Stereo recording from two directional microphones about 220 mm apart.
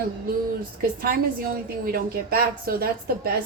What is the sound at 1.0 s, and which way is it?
A woman's voice, 40° right (ahead or behind).